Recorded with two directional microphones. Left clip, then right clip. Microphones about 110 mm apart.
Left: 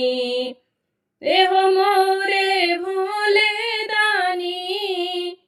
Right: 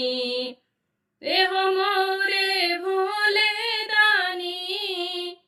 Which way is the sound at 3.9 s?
65° left (ahead or behind).